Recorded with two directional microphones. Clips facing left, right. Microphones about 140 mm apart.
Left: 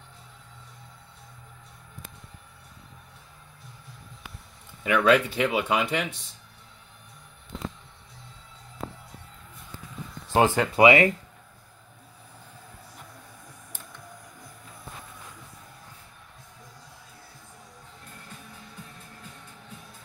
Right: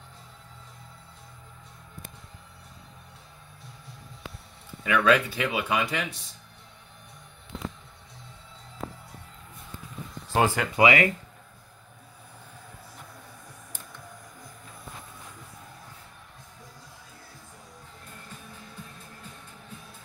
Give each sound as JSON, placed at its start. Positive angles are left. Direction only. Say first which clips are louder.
{"t": 4.8, "sound": "speech", "louder": "left 2 dB", "side_deg": 20}
{"t": 10.3, "sound": "speech", "louder": "left 3 dB", "side_deg": 20}